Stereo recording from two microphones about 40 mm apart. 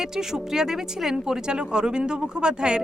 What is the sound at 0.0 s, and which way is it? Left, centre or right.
Speech, centre.